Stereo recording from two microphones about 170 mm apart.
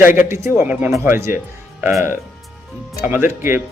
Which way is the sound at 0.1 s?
15° right (ahead or behind).